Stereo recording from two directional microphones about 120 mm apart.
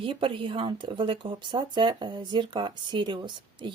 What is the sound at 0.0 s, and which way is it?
Speech, 45° right (ahead or behind).